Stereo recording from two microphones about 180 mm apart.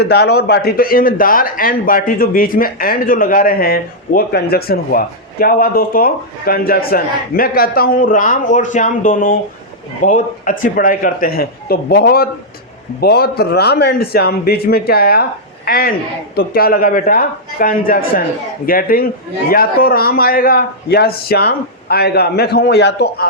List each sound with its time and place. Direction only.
0.0 s a man's voice: 65° left (ahead or behind)